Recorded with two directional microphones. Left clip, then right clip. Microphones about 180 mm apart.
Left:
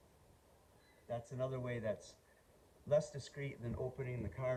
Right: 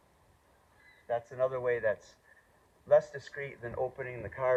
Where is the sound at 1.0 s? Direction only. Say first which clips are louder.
Right 11 dB; 45° left (ahead or behind).